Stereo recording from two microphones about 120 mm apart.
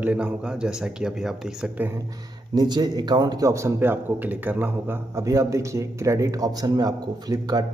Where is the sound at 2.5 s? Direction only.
35° right (ahead or behind).